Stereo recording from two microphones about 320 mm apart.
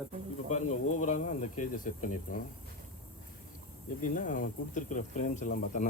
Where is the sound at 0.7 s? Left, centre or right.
Left.